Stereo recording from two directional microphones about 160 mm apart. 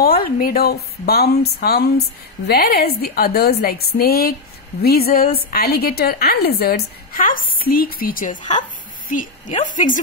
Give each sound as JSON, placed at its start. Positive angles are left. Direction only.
{"t": 0.0, "sound": "a woman's voice", "side_deg": 65}